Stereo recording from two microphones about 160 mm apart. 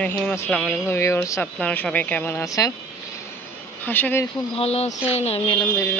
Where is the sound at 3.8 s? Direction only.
10° left (ahead or behind).